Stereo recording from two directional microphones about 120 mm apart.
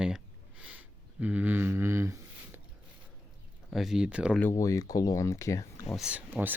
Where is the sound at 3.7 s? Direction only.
5° right (ahead or behind).